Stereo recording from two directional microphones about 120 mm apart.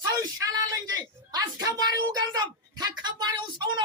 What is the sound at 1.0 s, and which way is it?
A woman's voice, 35° right (ahead or behind).